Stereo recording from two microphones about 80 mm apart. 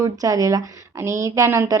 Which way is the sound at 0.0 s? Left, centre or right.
Right.